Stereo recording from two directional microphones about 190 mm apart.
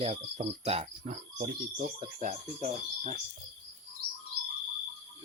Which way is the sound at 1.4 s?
45° right (ahead or behind).